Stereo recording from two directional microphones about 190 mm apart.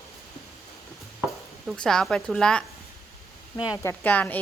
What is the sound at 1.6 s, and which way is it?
A woman's voice, 5° left (ahead or behind).